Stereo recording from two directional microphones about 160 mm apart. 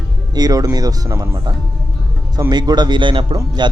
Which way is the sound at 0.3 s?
25° right (ahead or behind).